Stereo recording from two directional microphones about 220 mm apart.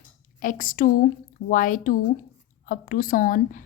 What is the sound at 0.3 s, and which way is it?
A woman's voice, 35° left (ahead or behind).